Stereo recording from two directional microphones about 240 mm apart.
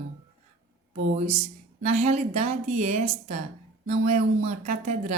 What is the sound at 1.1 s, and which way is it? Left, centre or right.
A woman's voice, right.